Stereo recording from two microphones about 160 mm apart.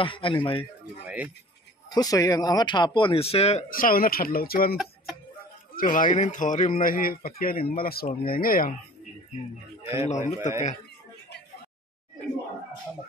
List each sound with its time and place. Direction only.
0.0 s speech: 30° left (ahead or behind)
1.0 s speech: 10° right (ahead or behind)
1.9 s speech: 25° left (ahead or behind); by 3.6 s 40° left (ahead or behind)
3.7 s speech: 65° left (ahead or behind)
5.8 s speech: 55° left (ahead or behind)
10.0 s a man's voice: 50° left (ahead or behind)